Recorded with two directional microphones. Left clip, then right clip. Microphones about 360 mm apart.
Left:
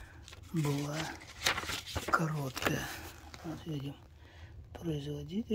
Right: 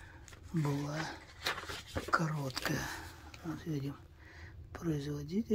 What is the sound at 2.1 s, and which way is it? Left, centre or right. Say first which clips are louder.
Speech: left 1 dB; centre.